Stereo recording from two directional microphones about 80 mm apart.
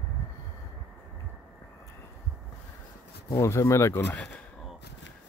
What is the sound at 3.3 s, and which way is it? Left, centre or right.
Speech, left.